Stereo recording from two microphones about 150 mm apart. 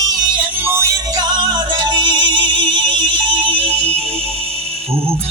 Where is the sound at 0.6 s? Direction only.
15° right (ahead or behind); by 3.8 s 35° right (ahead or behind).